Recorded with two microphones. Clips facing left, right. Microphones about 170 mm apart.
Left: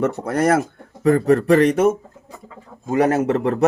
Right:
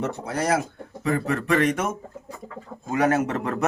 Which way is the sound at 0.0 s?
55° left (ahead or behind).